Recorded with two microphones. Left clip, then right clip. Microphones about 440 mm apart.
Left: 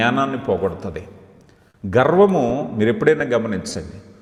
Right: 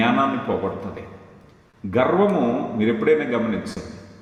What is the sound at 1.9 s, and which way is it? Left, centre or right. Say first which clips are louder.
A man's voice: left 4 dB; left.